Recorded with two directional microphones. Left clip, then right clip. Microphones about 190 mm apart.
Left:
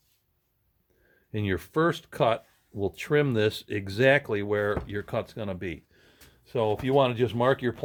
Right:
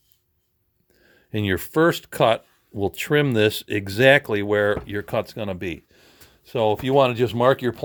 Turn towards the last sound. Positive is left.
turn(degrees=-35)  # may be behind; listen again after turning